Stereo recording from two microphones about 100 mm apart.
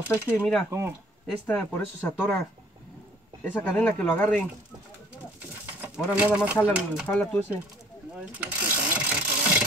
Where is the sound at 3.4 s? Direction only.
20° left (ahead or behind).